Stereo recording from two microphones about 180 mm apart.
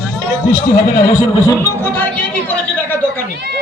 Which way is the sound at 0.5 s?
20° left (ahead or behind).